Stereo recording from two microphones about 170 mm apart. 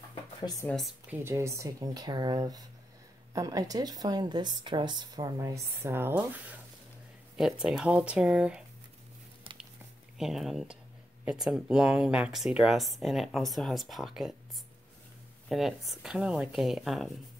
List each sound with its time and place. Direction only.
0.1 s a sound: 25° left (ahead or behind)
0.7 s speech: centre (ahead or behind)
1.2 s speech: 15° right (ahead or behind)
10.1 s speech: centre (ahead or behind)
15.4 s speech: centre (ahead or behind)